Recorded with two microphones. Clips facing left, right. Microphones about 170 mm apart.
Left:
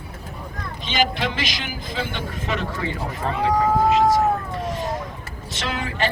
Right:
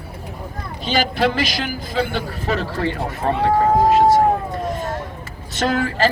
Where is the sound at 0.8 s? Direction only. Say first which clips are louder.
Right 4 dB; 40° right (ahead or behind).